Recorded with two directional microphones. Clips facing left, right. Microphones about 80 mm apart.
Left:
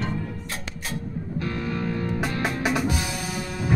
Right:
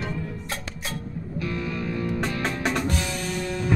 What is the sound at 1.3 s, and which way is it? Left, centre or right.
Music, left.